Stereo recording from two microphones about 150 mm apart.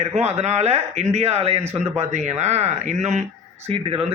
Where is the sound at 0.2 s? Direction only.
45° right (ahead or behind).